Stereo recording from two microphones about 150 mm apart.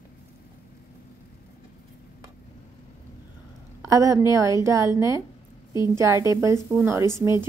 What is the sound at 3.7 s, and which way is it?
A woman's voice, 20° right (ahead or behind).